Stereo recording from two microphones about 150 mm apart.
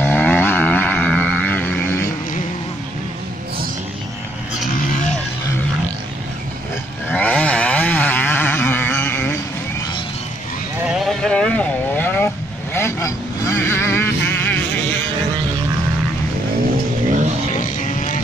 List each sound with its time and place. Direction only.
0.0 s vehicle: 10° left (ahead or behind)
7.1 s vehicle: 10° left (ahead or behind)
10.8 s vehicle: 5° right (ahead or behind); by 14.6 s 15° left (ahead or behind)
17.6 s vehicle: 55° left (ahead or behind)